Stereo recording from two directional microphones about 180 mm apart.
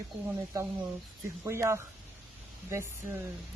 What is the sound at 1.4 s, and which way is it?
Speech, 15° right (ahead or behind).